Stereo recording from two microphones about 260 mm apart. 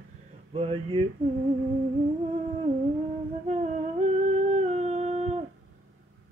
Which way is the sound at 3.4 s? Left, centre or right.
Right.